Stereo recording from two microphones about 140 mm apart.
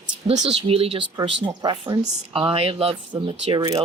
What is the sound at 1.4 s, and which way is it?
Speech, 30° right (ahead or behind).